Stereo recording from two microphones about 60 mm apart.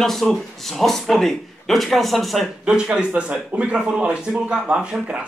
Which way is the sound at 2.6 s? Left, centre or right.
Centre.